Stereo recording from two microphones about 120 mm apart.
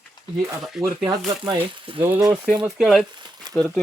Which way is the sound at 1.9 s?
50° right (ahead or behind).